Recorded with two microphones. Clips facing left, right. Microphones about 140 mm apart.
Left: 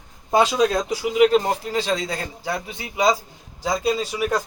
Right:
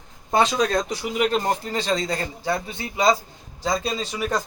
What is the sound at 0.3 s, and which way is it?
Speech, 10° left (ahead or behind).